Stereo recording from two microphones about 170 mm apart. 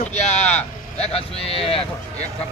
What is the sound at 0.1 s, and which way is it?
Vehicle, 40° left (ahead or behind).